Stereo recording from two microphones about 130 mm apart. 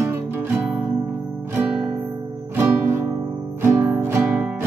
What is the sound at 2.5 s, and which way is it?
Music, 20° right (ahead or behind).